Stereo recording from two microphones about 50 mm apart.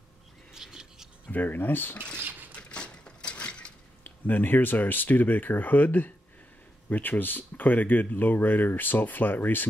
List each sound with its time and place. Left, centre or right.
0.5 s a sound: centre
1.3 s speech: left
2.5 s mechanisms: left
4.0 s speech: left